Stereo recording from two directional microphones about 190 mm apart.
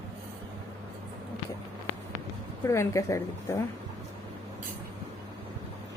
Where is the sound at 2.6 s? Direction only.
15° left (ahead or behind).